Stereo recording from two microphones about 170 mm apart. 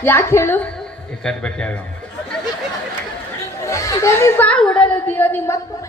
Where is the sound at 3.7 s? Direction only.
20° left (ahead or behind).